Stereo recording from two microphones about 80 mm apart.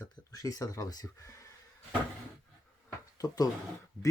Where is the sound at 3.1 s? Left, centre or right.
Left.